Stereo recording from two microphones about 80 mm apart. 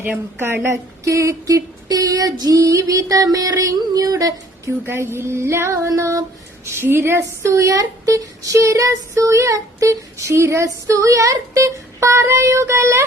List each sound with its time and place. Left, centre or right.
0.0 s speech: right
4.9 s child singing: right
6.7 s child singing: right
7.7 s child singing: right